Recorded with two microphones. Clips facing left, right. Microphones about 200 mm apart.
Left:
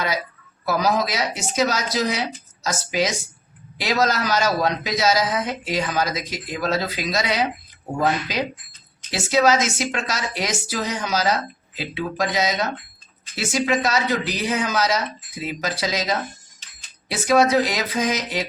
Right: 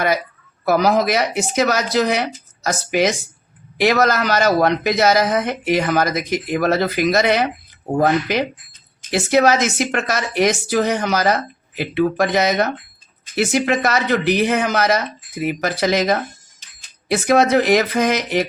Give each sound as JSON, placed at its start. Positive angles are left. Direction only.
{"t": 0.6, "sound": "speech", "side_deg": -60}